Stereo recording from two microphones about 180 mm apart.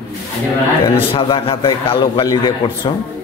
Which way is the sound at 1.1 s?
30° left (ahead or behind).